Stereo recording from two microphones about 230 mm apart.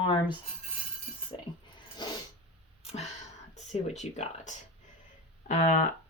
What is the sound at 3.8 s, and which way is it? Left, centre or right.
Speech, left.